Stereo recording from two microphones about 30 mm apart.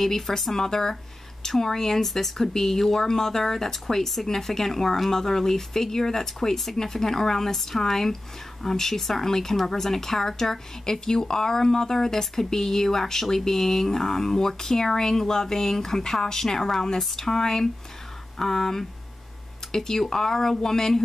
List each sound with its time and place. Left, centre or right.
0.0 s speech: centre